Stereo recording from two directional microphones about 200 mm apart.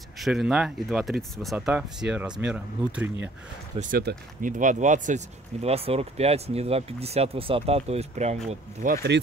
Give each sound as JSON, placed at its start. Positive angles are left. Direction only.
{"t": 0.2, "sound": "speech", "side_deg": 0}
{"t": 3.9, "sound": "speech", "side_deg": -45}
{"t": 8.9, "sound": "speech", "side_deg": -55}